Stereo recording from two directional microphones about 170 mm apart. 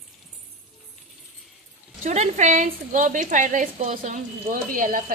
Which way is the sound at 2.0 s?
45° right (ahead or behind).